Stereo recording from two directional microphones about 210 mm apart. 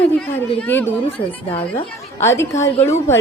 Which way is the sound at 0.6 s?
10° left (ahead or behind).